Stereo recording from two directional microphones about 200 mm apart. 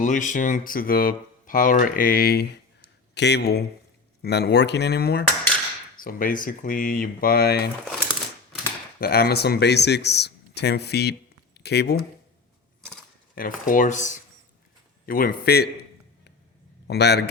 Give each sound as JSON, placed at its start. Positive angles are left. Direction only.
{"t": 0.0, "sound": "speech", "side_deg": 40}
{"t": 9.0, "sound": "speech", "side_deg": 50}
{"t": 13.3, "sound": "a man's voice", "side_deg": 45}